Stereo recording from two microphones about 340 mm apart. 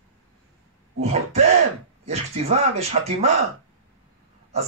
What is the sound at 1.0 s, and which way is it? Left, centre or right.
Speech, centre.